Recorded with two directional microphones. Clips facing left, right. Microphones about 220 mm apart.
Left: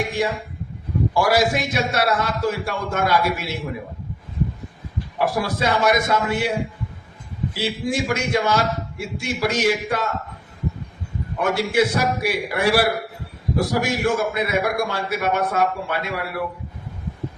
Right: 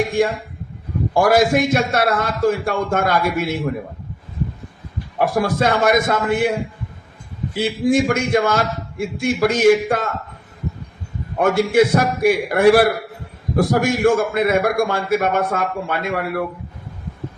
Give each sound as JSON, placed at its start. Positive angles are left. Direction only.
{"t": 0.2, "sound": "a man's voice", "side_deg": -50}
{"t": 5.1, "sound": "a man's voice", "side_deg": -50}
{"t": 7.5, "sound": "a man's voice", "side_deg": -55}
{"t": 11.3, "sound": "a man's voice", "side_deg": -55}